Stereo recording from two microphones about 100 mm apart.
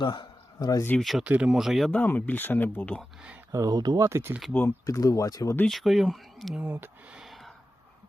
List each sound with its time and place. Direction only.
0.0 s a sound: 50° left (ahead or behind)
0.9 s speech: centre (ahead or behind)
1.2 s speech: 10° right (ahead or behind)
1.9 s speech: 15° left (ahead or behind)
3.5 s speech: 40° right (ahead or behind)
4.0 s speech: 25° right (ahead or behind)
4.9 s speech: 35° left (ahead or behind)
5.6 s speech: centre (ahead or behind)
6.6 s speech: 20° right (ahead or behind)
7.1 s a sound: 5° right (ahead or behind)